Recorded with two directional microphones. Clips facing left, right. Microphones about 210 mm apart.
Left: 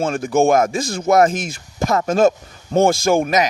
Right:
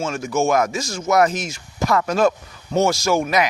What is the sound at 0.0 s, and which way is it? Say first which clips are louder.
Speech: left 5 dB; 55° left (ahead or behind).